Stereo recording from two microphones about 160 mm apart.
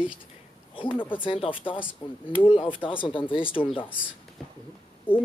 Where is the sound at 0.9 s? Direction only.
10° left (ahead or behind).